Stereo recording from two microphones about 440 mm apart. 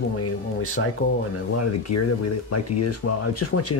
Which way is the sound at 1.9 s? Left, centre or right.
Left.